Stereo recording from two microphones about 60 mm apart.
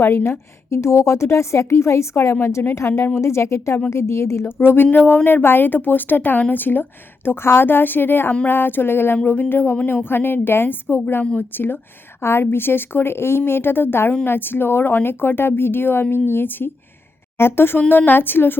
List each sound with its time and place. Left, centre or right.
0.0 s a woman's voice: left
4.4 s speech: left